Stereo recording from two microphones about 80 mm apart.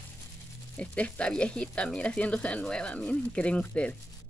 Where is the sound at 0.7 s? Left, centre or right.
Centre.